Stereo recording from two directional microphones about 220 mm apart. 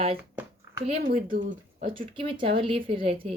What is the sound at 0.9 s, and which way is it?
Speech, 40° right (ahead or behind).